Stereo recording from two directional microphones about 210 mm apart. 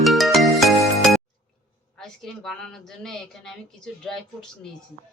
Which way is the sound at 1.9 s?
Centre (ahead or behind).